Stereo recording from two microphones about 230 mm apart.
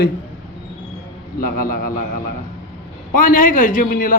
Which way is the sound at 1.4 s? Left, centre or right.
Left.